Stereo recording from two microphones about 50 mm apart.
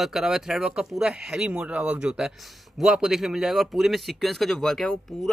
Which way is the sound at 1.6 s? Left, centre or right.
Right.